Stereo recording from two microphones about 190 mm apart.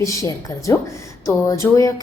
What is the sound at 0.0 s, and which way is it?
Speech, 15° left (ahead or behind).